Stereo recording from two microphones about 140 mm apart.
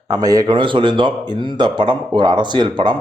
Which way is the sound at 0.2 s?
25° right (ahead or behind).